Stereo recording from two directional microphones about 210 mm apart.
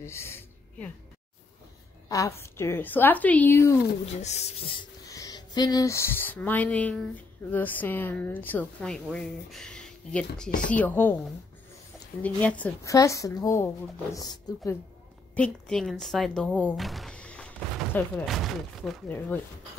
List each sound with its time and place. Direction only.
0.0 s a sound: 10° left (ahead or behind)
2.0 s a woman's voice: 15° left (ahead or behind)
4.0 s a woman's voice: 30° left (ahead or behind); by 11.1 s 10° left (ahead or behind)
12.2 s a woman's voice: 5° left (ahead or behind)
15.3 s speech: 5° left (ahead or behind)